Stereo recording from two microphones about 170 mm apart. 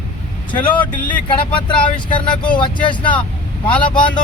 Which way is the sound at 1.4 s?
30° left (ahead or behind).